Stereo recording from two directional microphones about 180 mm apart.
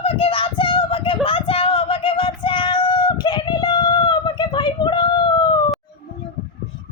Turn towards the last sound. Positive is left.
turn(degrees=25)  # may be behind; listen again after turning